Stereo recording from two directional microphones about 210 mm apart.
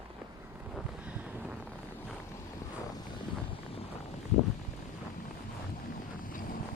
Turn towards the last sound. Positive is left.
turn(degrees=40)  # may be behind; listen again after turning